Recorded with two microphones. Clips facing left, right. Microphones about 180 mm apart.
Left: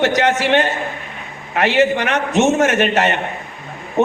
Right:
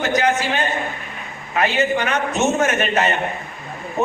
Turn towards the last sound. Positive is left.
turn(degrees=25)  # may be behind; listen again after turning